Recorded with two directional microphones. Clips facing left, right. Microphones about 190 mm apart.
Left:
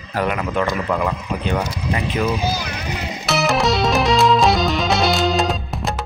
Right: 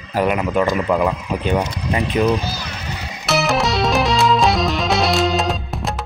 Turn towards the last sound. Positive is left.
turn(degrees=0)  # may be behind; listen again after turning